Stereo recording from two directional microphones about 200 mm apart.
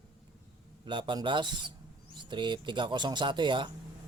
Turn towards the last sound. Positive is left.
turn(degrees=-25)  # may be behind; listen again after turning